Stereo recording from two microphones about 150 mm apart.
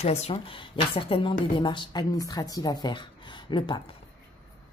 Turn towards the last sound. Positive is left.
turn(degrees=30)  # may be behind; listen again after turning